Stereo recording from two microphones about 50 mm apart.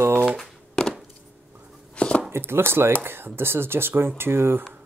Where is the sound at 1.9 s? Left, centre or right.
Left.